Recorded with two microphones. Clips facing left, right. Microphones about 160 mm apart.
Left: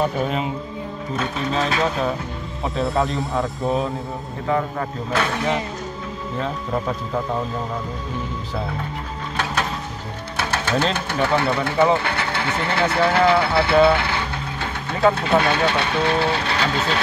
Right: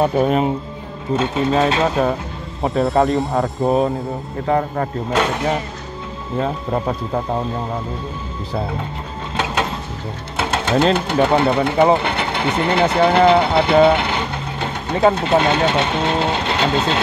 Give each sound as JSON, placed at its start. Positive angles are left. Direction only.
{"t": 0.0, "sound": "speech", "side_deg": -45}
{"t": 1.1, "sound": "speech", "side_deg": -25}
{"t": 2.6, "sound": "speech", "side_deg": -45}
{"t": 6.4, "sound": "speech", "side_deg": -40}
{"t": 10.4, "sound": "sewing machine", "side_deg": -25}
{"t": 11.2, "sound": "speech", "side_deg": -20}